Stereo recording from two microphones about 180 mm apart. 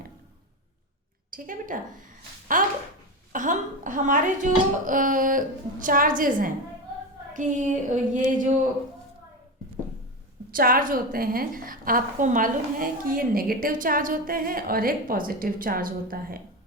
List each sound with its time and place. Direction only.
1.3 s a woman's voice: 50° right (ahead or behind)
10.5 s a woman's voice: 50° right (ahead or behind)